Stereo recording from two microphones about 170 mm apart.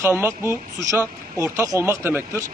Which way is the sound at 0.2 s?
15° right (ahead or behind).